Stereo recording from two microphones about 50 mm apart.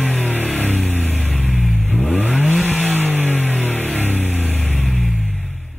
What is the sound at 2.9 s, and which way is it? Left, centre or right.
Music, right.